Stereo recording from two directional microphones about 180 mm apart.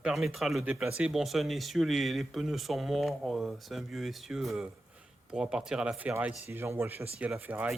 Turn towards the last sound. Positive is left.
turn(degrees=-10)  # may be behind; listen again after turning